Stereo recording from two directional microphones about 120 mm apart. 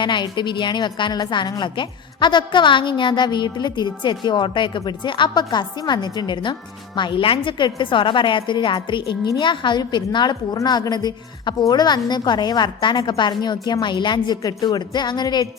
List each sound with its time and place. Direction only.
0.0 s a woman's voice: 40° left (ahead or behind)